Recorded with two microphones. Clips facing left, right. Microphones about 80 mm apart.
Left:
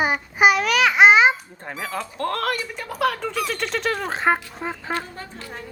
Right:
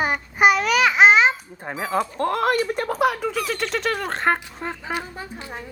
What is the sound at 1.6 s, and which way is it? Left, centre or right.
Speech, centre.